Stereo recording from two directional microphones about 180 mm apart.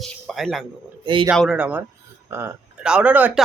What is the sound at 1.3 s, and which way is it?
Speech, 5° right (ahead or behind).